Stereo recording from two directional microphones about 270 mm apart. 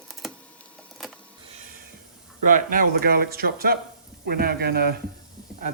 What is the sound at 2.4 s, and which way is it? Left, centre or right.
Speech, right.